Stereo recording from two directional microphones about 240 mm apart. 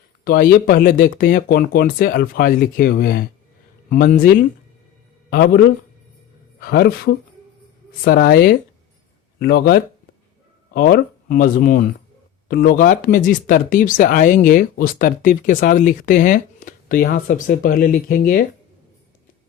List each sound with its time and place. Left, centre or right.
0.3 s speech: left
5.3 s speech: left